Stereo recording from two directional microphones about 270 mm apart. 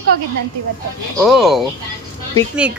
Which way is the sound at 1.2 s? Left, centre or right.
Centre.